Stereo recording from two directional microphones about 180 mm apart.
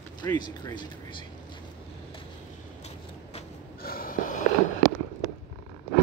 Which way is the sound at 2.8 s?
35° left (ahead or behind).